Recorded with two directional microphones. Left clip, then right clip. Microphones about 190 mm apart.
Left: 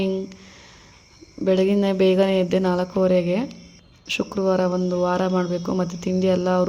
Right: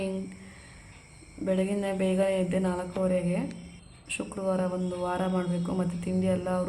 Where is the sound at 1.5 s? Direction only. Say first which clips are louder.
Left 9 dB; 40° left (ahead or behind).